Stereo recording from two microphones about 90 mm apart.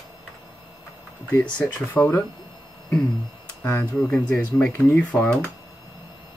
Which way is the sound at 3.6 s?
20° left (ahead or behind).